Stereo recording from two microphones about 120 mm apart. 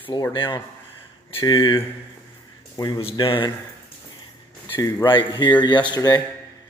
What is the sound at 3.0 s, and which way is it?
Speech, 50° left (ahead or behind).